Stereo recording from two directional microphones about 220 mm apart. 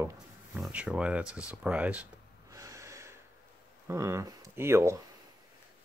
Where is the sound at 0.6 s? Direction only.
5° right (ahead or behind).